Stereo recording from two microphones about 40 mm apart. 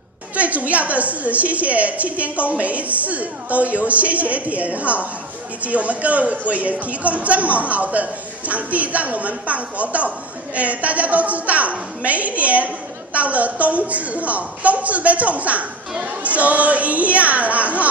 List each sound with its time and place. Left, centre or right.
0.4 s speech: right